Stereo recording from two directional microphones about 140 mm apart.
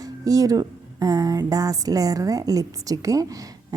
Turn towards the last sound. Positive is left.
turn(degrees=-25)  # may be behind; listen again after turning